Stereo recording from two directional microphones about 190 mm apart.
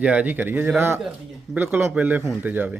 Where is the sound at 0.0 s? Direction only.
5° right (ahead or behind).